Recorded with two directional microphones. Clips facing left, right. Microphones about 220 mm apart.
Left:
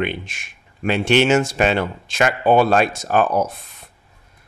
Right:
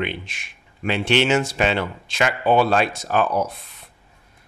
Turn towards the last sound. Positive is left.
turn(degrees=45)  # may be behind; listen again after turning